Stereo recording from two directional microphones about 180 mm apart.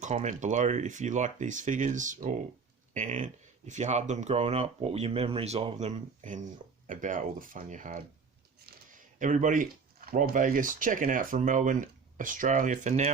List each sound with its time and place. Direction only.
0.0 s speech: 40° right (ahead or behind)
5.9 s speech: 45° right (ahead or behind)
9.1 s speech: 45° right (ahead or behind)